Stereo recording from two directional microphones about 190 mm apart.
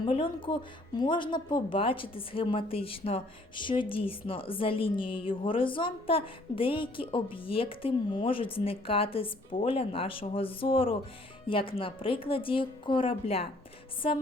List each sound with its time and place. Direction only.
0.0 s a woman's voice: 25° left (ahead or behind)